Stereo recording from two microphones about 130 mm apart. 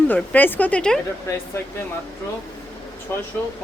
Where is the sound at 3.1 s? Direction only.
15° left (ahead or behind).